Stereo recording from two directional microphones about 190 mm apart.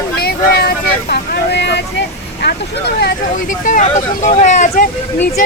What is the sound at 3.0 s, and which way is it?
Speech, 45° left (ahead or behind).